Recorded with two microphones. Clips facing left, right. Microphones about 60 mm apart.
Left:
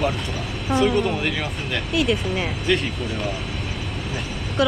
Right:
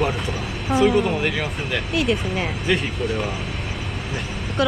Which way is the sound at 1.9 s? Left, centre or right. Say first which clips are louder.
Left 1 dB; right.